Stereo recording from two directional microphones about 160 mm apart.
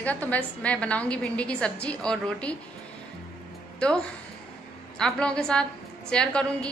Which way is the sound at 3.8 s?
5° left (ahead or behind).